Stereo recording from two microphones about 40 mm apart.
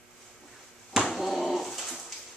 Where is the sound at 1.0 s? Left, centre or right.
Centre.